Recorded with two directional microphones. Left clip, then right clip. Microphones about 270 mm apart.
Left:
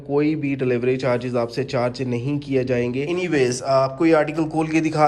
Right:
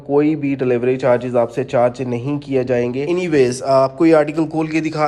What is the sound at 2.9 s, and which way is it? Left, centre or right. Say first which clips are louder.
A man's voice: right 5 dB; centre.